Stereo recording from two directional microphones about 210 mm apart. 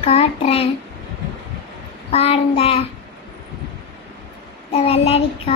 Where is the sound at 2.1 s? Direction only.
30° left (ahead or behind).